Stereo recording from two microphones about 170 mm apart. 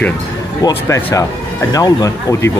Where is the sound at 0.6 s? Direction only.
20° left (ahead or behind).